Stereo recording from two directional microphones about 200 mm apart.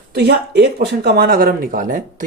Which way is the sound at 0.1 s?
55° right (ahead or behind).